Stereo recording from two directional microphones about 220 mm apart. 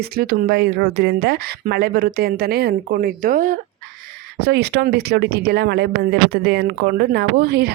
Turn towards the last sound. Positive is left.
turn(degrees=-45)  # may be behind; listen again after turning